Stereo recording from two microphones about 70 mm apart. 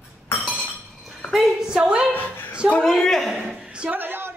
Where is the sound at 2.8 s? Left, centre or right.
Centre.